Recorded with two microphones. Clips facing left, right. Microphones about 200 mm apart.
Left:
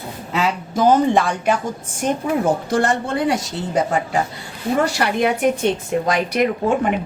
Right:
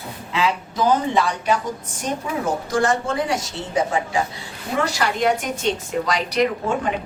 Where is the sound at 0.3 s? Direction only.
45° left (ahead or behind); by 3.3 s 60° left (ahead or behind).